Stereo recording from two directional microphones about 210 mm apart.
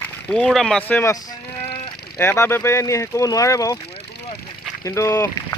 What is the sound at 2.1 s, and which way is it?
Speech, 10° left (ahead or behind).